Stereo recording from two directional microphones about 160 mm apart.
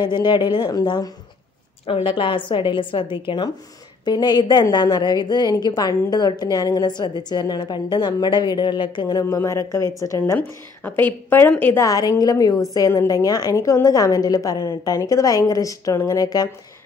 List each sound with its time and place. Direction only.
0.0 s a woman's voice: 30° left (ahead or behind)
9.2 s a woman's voice: 20° left (ahead or behind)